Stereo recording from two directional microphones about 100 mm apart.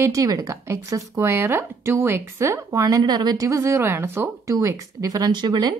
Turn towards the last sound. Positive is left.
turn(degrees=-45)  # may be behind; listen again after turning